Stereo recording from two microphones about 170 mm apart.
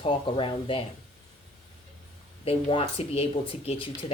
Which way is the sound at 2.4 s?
35° left (ahead or behind).